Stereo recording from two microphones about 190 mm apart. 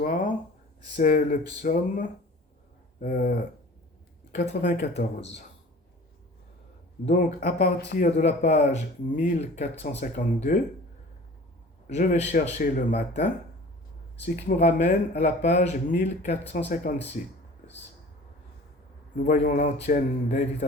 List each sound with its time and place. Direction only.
0.0 s speech: 45° left (ahead or behind)
4.4 s speech: 45° left (ahead or behind)
7.1 s speech: 45° left (ahead or behind)
11.9 s speech: 35° left (ahead or behind)
14.4 s speech: 40° left (ahead or behind)
17.2 s speech: 45° left (ahead or behind)
19.1 s speech: 40° left (ahead or behind)